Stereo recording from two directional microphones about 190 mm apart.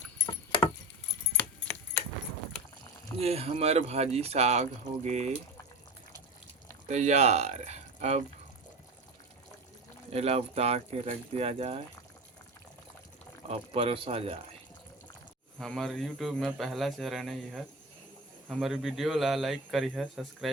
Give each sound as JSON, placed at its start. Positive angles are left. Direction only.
{"t": 3.2, "sound": "speech", "side_deg": -30}
{"t": 6.8, "sound": "speech", "side_deg": -35}
{"t": 10.1, "sound": "speech", "side_deg": -35}
{"t": 13.5, "sound": "speech", "side_deg": -30}
{"t": 15.5, "sound": "speech", "side_deg": 0}